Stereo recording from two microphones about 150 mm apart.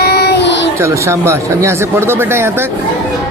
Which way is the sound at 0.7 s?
20° right (ahead or behind).